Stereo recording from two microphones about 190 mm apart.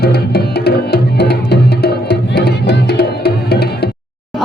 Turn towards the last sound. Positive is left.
turn(degrees=55)  # may be behind; listen again after turning